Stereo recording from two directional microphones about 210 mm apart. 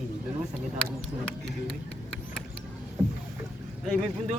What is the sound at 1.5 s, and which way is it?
Speech, centre (ahead or behind).